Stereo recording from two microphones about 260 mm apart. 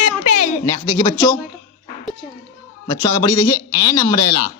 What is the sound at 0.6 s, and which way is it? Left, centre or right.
Speech, centre.